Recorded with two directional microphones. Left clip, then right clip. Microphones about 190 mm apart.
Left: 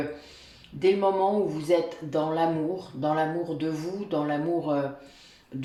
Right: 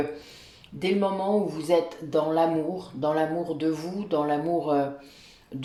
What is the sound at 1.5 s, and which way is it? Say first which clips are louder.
Speech: right 1 dB; 40° right (ahead or behind).